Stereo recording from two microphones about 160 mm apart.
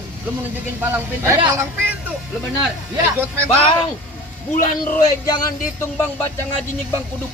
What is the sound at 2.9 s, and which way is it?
Speech, 15° right (ahead or behind).